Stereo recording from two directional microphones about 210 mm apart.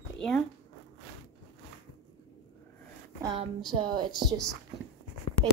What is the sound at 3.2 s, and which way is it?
Speech, 25° right (ahead or behind).